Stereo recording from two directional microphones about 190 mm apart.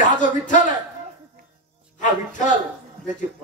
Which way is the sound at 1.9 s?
40° left (ahead or behind).